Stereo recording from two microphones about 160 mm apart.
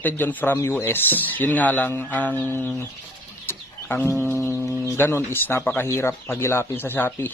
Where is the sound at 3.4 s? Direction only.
10° left (ahead or behind).